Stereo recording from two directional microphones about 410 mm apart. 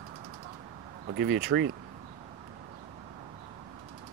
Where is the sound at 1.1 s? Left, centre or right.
Right.